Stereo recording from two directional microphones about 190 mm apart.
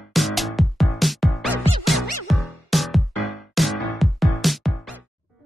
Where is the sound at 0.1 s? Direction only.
Centre (ahead or behind).